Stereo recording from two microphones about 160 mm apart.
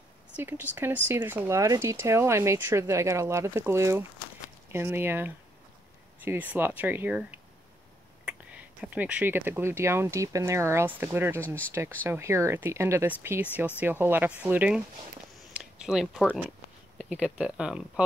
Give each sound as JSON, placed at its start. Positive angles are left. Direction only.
{"t": 0.4, "sound": "speech", "side_deg": -15}
{"t": 8.8, "sound": "speech", "side_deg": -10}
{"t": 15.5, "sound": "a sound", "side_deg": -5}
{"t": 17.0, "sound": "speech", "side_deg": -5}